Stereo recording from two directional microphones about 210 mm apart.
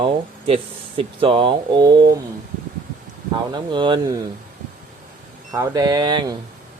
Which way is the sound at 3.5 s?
20° right (ahead or behind).